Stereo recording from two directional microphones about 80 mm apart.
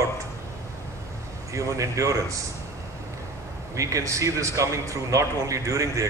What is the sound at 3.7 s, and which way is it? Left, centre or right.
A man's voice, right.